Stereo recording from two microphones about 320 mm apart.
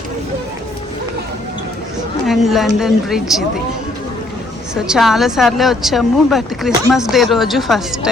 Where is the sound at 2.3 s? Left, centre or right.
Centre.